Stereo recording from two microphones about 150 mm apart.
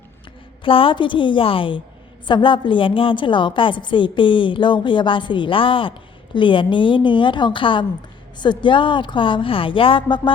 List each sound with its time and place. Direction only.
0.6 s a woman's voice: 35° left (ahead or behind)